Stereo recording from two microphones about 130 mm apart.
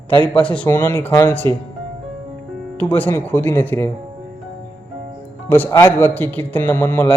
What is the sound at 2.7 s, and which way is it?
Speech, 15° left (ahead or behind).